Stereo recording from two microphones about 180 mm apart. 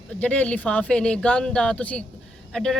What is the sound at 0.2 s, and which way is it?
A woman's voice, 10° left (ahead or behind).